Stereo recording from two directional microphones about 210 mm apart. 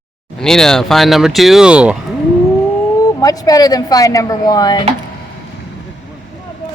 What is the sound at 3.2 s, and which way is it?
Speech, 15° left (ahead or behind).